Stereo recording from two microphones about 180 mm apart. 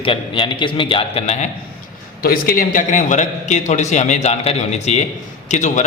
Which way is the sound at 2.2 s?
55° left (ahead or behind).